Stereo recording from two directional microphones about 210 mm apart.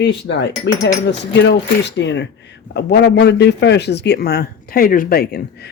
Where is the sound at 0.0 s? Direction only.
55° left (ahead or behind).